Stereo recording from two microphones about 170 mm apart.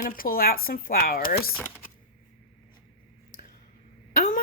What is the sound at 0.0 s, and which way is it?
A woman's voice, 55° left (ahead or behind).